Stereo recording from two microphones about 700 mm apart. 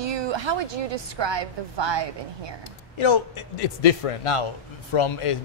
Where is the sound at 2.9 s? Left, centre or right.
Left.